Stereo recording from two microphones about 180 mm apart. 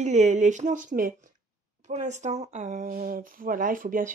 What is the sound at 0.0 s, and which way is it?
Speech, 40° right (ahead or behind).